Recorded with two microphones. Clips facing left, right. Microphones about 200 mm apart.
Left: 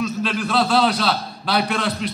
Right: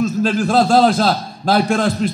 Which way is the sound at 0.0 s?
45° right (ahead or behind).